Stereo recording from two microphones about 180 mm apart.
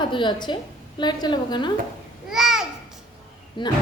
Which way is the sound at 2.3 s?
Centre (ahead or behind).